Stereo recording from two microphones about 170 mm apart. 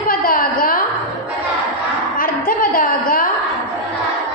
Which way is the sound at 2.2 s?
55° left (ahead or behind).